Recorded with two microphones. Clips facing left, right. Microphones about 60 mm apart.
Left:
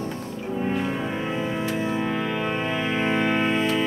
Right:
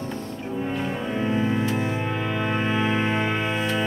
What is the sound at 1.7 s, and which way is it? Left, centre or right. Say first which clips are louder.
Music: left 1 dB; right.